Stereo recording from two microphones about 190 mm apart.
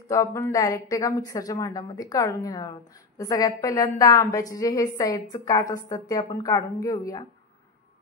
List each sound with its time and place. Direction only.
0.1 s a woman's voice: 15° left (ahead or behind)